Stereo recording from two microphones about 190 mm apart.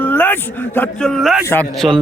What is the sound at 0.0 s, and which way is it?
A man's voice, 10° left (ahead or behind).